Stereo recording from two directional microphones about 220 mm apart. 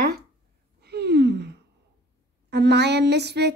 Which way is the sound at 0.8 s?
45° right (ahead or behind).